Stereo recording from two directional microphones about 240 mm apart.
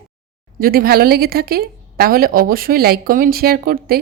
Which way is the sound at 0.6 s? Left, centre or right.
Right.